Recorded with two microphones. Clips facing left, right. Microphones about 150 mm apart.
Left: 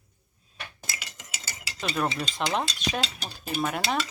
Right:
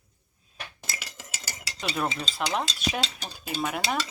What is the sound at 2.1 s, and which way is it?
Stir, 5° left (ahead or behind).